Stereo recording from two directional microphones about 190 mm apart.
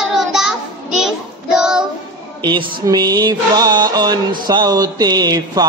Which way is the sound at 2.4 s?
25° right (ahead or behind).